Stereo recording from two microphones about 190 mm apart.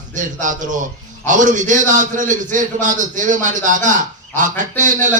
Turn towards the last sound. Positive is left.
turn(degrees=-40)  # may be behind; listen again after turning